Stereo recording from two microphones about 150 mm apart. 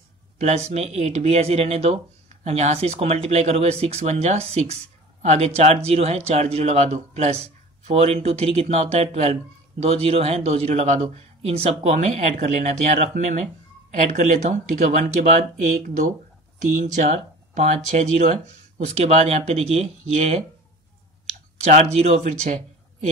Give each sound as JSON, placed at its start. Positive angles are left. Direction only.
{"t": 0.7, "sound": "speech", "side_deg": -45}
{"t": 21.5, "sound": "speech", "side_deg": -50}